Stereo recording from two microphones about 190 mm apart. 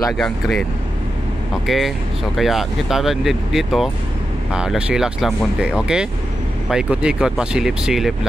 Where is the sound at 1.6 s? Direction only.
Centre (ahead or behind).